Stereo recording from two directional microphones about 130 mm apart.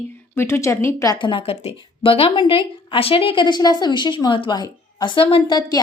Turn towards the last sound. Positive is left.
turn(degrees=40)  # may be behind; listen again after turning